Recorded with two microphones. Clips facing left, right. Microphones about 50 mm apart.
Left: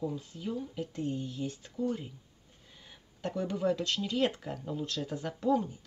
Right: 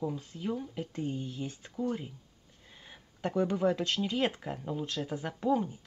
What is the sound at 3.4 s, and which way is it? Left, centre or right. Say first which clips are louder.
Speech: right 3 dB; right.